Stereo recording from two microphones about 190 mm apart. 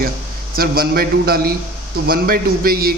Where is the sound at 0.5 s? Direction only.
55° right (ahead or behind).